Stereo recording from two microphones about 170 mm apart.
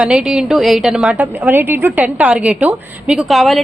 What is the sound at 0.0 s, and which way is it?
A woman's voice, 5° right (ahead or behind).